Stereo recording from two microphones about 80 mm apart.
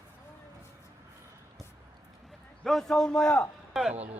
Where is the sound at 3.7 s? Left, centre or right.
Centre.